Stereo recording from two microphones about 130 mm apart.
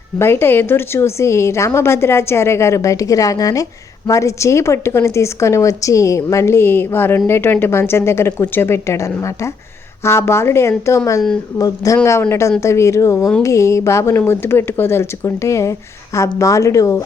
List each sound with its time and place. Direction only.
0.2 s a woman's voice: 15° left (ahead or behind)